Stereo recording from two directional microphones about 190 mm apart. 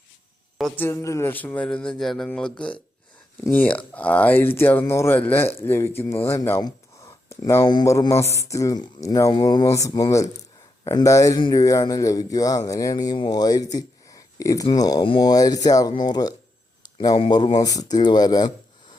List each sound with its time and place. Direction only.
0.6 s a man's voice: 10° left (ahead or behind)